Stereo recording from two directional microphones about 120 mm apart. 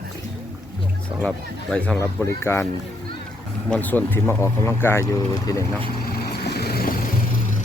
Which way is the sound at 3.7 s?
15° left (ahead or behind).